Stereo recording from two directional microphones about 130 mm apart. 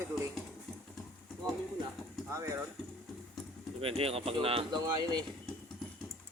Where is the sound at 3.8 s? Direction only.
45° right (ahead or behind).